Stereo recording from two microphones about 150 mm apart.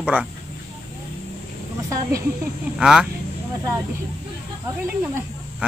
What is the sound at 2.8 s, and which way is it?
Speech, 5° right (ahead or behind).